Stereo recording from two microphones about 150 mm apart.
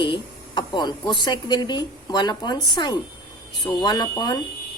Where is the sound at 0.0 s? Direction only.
30° left (ahead or behind).